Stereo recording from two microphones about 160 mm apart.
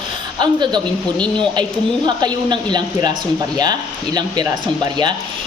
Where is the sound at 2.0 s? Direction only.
25° right (ahead or behind).